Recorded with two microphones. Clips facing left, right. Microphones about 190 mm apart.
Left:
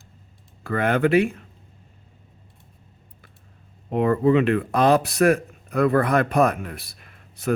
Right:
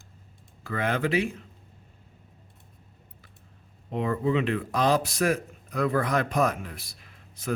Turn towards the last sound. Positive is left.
turn(degrees=60)  # may be behind; listen again after turning